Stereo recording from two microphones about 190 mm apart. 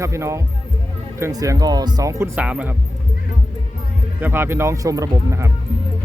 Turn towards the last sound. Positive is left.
turn(degrees=-15)  # may be behind; listen again after turning